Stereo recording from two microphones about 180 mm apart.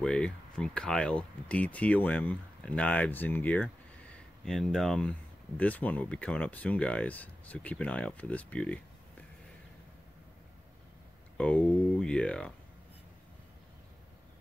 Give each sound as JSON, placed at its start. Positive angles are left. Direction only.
{"t": 0.0, "sound": "speech", "side_deg": 5}
{"t": 11.3, "sound": "speech", "side_deg": 5}